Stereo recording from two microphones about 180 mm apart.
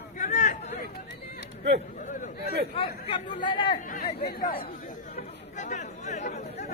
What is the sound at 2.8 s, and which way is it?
Speech, 30° left (ahead or behind).